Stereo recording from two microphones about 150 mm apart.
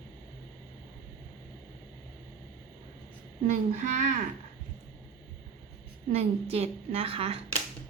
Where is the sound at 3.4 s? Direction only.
55° right (ahead or behind).